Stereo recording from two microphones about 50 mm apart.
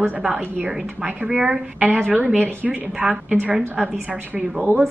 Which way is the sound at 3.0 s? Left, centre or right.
Centre.